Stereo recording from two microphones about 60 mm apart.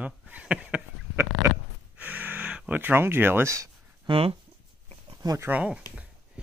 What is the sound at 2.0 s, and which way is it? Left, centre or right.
Gasp, right.